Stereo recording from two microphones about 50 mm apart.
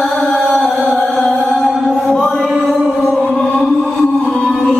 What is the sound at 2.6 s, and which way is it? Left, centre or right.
Music, centre.